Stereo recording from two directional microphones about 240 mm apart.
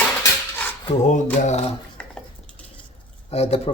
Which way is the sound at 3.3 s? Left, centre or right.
Left.